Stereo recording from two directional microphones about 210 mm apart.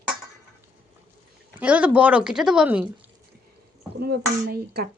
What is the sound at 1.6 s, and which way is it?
Speech, 5° right (ahead or behind).